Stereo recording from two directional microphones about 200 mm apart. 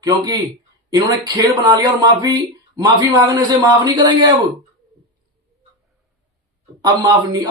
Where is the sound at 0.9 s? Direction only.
20° right (ahead or behind).